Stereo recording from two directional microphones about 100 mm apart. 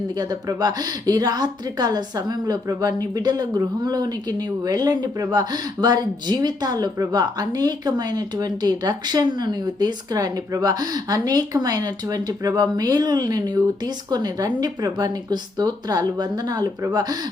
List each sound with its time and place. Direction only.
0.2 s a woman's voice: 40° right (ahead or behind)